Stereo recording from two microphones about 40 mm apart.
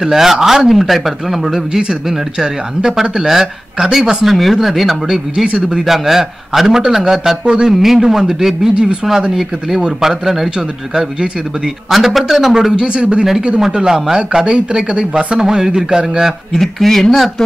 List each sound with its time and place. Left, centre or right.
0.0 s speech: centre
5.8 s speech: centre
7.4 s speech: right
7.7 s speech: centre
11.0 s speech: centre
11.9 s a man's voice: centre
12.5 s speech: centre
16.5 s speech: centre